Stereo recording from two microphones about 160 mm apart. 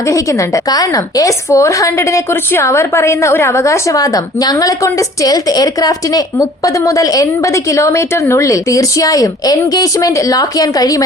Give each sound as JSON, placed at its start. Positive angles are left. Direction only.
{"t": 0.1, "sound": "a woman's voice", "side_deg": 20}